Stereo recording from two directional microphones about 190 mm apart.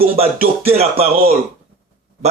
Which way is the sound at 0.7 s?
30° right (ahead or behind).